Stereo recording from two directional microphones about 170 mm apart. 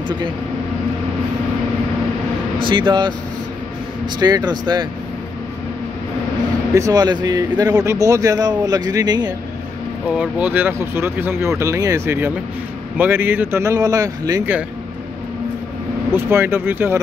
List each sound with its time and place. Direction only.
2.6 s speech: 30° right (ahead or behind)
6.7 s speech: 20° right (ahead or behind)
10.0 s speech: 10° right (ahead or behind)
16.2 s speech: 15° right (ahead or behind)